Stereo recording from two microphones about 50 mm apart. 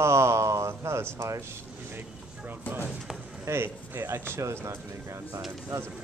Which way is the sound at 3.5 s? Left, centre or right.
Right.